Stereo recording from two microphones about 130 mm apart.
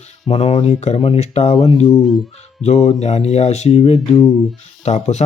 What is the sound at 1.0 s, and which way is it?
Speech, 40° left (ahead or behind).